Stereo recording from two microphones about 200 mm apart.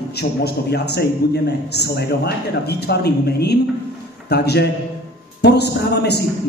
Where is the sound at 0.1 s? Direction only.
55° left (ahead or behind).